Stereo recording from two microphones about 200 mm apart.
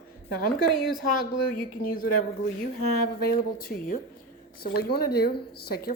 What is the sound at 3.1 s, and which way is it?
A woman's voice, 50° left (ahead or behind).